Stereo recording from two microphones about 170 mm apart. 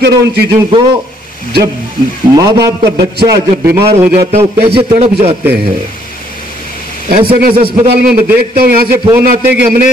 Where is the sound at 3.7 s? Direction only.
15° right (ahead or behind).